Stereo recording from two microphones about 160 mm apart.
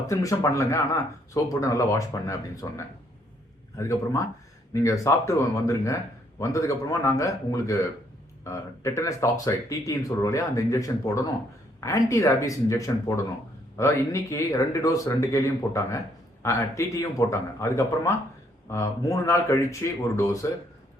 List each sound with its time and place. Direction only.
0.1 s a man's voice: 20° left (ahead or behind)